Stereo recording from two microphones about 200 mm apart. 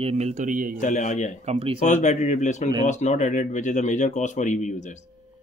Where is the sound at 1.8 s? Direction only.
35° left (ahead or behind).